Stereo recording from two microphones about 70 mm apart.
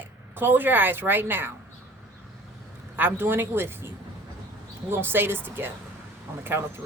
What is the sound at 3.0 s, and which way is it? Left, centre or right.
Speech, right.